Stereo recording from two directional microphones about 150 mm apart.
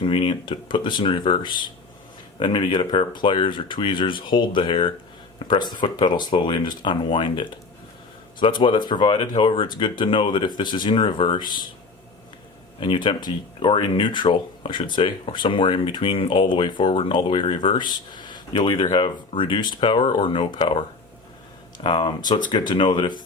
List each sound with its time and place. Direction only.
0.0 s speech: 35° left (ahead or behind)
12.8 s speech: 30° left (ahead or behind)
21.8 s speech: 35° left (ahead or behind)